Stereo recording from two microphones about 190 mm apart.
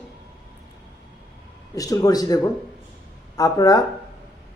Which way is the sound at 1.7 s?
20° left (ahead or behind).